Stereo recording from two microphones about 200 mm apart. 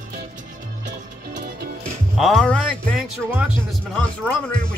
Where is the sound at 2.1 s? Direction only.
Centre (ahead or behind).